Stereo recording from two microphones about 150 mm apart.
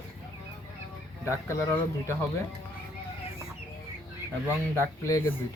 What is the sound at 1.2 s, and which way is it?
Speech, 20° left (ahead or behind).